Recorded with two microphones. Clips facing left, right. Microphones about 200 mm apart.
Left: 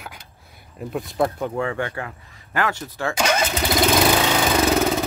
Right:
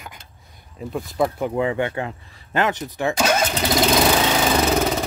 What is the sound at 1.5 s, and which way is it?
Speech, 20° right (ahead or behind).